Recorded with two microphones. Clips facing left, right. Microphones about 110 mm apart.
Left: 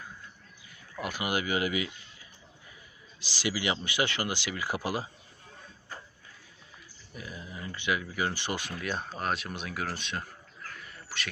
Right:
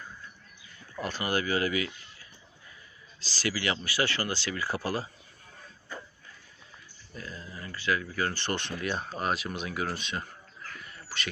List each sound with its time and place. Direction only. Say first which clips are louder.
0.9 s speech: right 1 dB; 10° left (ahead or behind)
7.1 s speech: even; 15° left (ahead or behind); by 10.2 s centre (ahead or behind)
10.8 s bird: right 1 dB; centre (ahead or behind)